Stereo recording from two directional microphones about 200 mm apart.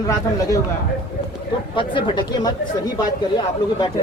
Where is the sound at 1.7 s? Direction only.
25° left (ahead or behind).